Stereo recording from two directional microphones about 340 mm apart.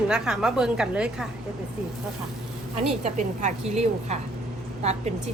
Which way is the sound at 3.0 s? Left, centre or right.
Right.